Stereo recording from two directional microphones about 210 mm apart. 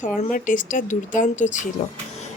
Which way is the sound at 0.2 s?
40° left (ahead or behind).